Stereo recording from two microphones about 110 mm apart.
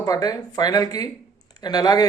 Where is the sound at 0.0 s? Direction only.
35° left (ahead or behind).